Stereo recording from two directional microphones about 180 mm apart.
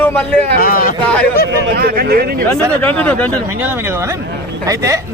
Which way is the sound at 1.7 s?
60° right (ahead or behind).